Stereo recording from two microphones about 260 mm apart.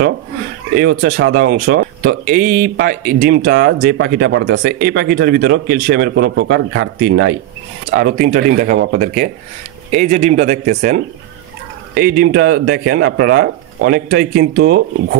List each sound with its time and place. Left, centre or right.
0.7 s speech: right